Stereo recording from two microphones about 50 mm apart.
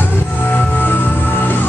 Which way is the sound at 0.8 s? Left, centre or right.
Left.